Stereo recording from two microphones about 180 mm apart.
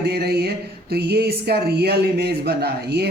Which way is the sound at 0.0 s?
65° right (ahead or behind).